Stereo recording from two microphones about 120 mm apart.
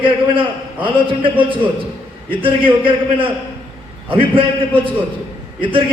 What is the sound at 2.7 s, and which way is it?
A man's voice, 45° right (ahead or behind).